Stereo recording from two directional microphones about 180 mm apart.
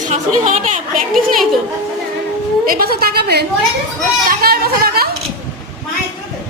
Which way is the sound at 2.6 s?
55° right (ahead or behind).